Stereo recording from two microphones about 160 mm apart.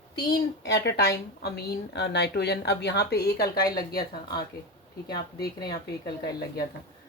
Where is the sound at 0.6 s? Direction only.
90° left.